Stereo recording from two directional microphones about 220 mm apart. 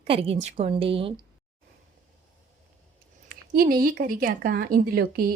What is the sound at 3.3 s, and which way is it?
Speech, 40° right (ahead or behind).